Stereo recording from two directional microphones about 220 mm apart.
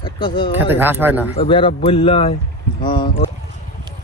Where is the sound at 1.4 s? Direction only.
25° left (ahead or behind).